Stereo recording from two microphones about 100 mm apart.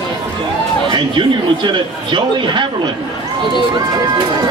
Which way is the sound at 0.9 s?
50° right (ahead or behind).